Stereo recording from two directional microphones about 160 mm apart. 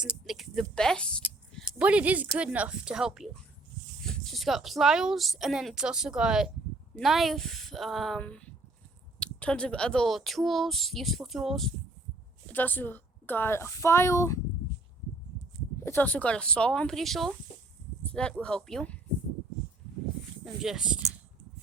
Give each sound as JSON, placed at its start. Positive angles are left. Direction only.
{"t": 0.0, "sound": "a sound", "side_deg": -5}
{"t": 1.8, "sound": "a woman's voice", "side_deg": -10}
{"t": 12.5, "sound": "a woman's voice", "side_deg": 10}
{"t": 15.8, "sound": "speech", "side_deg": 15}
{"t": 20.4, "sound": "speech", "side_deg": 0}